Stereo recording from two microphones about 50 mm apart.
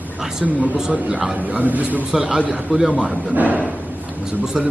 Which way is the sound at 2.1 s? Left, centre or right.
Centre.